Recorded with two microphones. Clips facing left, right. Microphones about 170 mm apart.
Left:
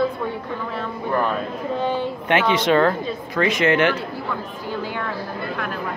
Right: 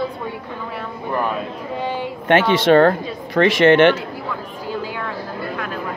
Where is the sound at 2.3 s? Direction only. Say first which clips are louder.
Right 5 dB; 50° right (ahead or behind).